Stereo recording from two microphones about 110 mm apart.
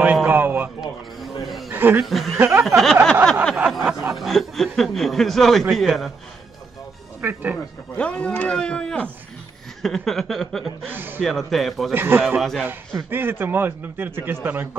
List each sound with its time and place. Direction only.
0.0 s a man's voice: 15° right (ahead or behind)
0.7 s a sound: centre (ahead or behind)
1.7 s a sound: 20° right (ahead or behind)
2.0 s speech: centre (ahead or behind)
2.3 s a man's voice: 20° right (ahead or behind)
2.6 s speech: centre (ahead or behind)
7.2 s speech: 20° right (ahead or behind)
8.0 s speech: 10° left (ahead or behind)
10.9 s a man's voice: 15° right (ahead or behind)
11.2 s speech: centre (ahead or behind)
11.9 s a man's voice: 20° right (ahead or behind)
12.4 s speech: 5° left (ahead or behind)
13.1 s a man's voice: 20° right (ahead or behind)